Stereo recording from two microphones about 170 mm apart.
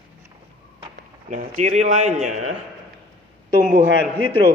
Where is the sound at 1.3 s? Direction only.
45° right (ahead or behind).